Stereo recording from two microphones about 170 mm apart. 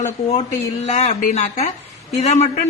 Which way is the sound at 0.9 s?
40° left (ahead or behind).